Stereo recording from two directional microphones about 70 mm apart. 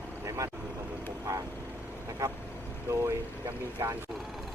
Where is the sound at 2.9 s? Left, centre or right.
Right.